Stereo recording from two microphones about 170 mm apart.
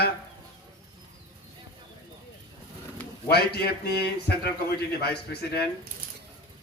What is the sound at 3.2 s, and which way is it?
A man's voice, 70° left (ahead or behind).